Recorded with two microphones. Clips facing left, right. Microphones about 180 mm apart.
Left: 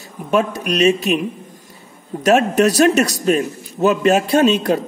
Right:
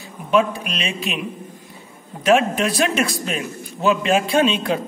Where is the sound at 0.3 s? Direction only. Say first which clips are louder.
Left 1 dB; 45° left (ahead or behind).